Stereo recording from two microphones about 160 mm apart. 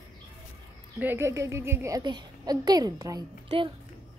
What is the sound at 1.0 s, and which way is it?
A child's voice, 15° right (ahead or behind).